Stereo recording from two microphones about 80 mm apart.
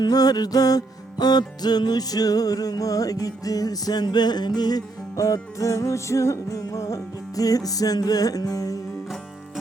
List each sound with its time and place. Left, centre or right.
0.0 s music: left